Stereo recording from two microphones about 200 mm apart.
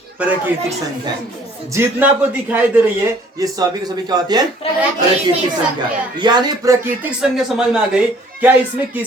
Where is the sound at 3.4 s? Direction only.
20° right (ahead or behind).